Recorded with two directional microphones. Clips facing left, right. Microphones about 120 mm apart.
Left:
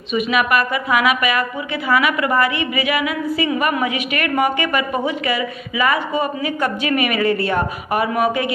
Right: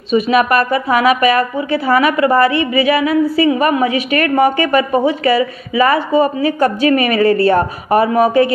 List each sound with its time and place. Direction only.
0.1 s a woman's voice: 35° right (ahead or behind)